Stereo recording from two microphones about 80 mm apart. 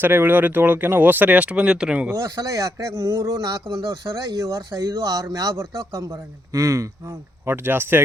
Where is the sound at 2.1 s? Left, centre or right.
Right.